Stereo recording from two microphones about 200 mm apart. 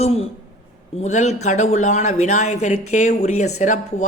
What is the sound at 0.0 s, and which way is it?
Speech, 30° left (ahead or behind).